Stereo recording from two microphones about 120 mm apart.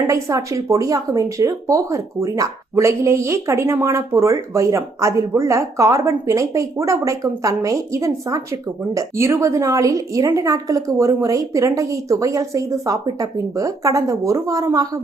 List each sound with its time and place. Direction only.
0.1 s speech: 25° right (ahead or behind)